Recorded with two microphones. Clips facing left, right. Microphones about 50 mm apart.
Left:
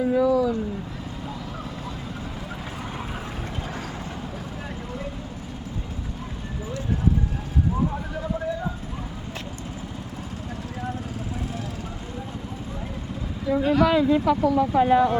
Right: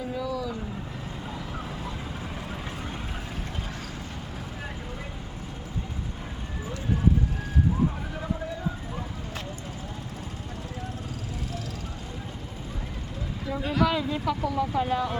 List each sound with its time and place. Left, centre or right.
0.1 s a sound: left
13.5 s speech: centre
14.7 s speech: centre